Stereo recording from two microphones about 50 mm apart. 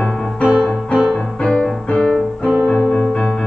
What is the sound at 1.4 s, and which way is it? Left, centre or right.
Music, centre.